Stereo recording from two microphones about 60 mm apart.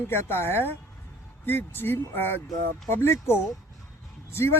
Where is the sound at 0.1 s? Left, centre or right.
Left.